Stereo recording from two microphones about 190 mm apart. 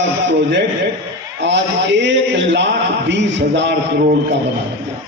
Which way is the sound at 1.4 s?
70° right (ahead or behind).